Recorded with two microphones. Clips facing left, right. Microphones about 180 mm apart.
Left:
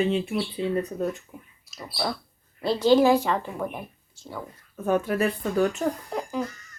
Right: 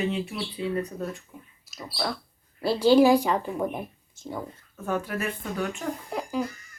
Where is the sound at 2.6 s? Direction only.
10° right (ahead or behind).